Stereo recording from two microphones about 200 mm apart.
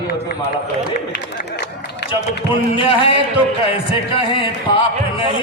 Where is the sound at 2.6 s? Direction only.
25° left (ahead or behind).